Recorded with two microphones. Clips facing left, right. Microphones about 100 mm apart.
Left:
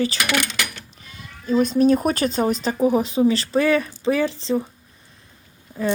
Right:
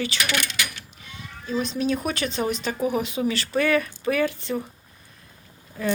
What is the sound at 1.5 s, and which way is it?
Speech, 45° left (ahead or behind).